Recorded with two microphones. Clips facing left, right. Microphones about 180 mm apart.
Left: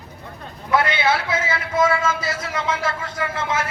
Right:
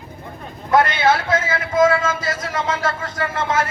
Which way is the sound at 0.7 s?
50° right (ahead or behind).